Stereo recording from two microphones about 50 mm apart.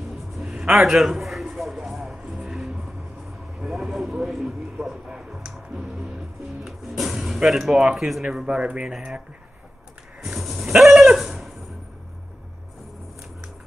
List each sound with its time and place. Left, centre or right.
0.4 s music: centre
0.7 s a sound: centre
1.9 s music: centre
3.6 s vehicle: centre
4.8 s a sound: centre
6.6 s music: centre
7.4 s speech: centre
8.5 s speech: right
10.2 s a sound: centre